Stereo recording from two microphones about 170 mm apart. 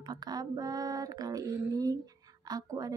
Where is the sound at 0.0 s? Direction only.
25° right (ahead or behind).